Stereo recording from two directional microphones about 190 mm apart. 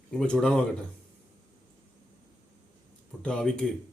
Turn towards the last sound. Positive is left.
turn(degrees=5)  # may be behind; listen again after turning